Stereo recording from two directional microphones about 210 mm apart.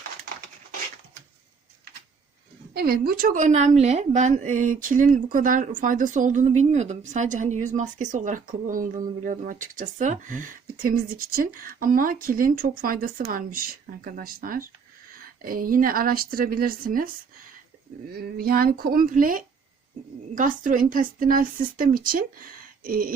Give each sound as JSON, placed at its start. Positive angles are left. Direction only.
{"t": 2.7, "sound": "speech", "side_deg": -45}
{"t": 18.1, "sound": "speech", "side_deg": -45}